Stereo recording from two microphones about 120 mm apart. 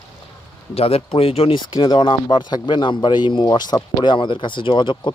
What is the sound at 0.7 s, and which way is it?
Speech, 55° left (ahead or behind).